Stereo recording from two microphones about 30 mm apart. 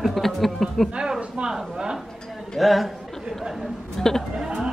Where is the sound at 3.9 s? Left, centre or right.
Centre.